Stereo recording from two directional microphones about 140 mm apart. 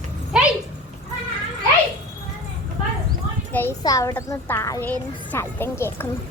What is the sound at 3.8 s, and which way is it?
Speech, 25° left (ahead or behind).